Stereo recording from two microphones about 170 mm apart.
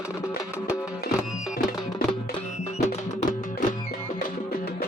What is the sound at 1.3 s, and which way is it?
Music, centre (ahead or behind).